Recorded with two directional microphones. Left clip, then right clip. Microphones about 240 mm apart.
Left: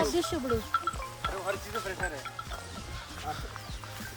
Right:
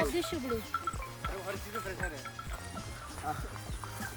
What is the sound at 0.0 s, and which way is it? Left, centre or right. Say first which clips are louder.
Speech: left 4 dB; centre.